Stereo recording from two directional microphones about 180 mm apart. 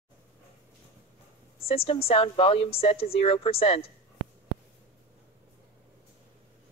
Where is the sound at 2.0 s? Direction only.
30° left (ahead or behind).